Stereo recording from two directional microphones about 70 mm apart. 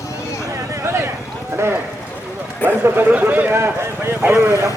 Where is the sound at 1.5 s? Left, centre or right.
Right.